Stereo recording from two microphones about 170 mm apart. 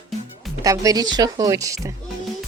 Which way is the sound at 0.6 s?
20° right (ahead or behind).